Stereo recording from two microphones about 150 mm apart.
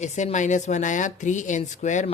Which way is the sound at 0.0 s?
50° left (ahead or behind).